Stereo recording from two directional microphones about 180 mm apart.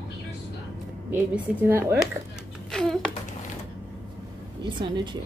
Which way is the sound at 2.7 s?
5° left (ahead or behind).